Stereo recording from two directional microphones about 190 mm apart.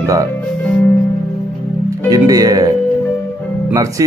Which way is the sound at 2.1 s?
20° right (ahead or behind).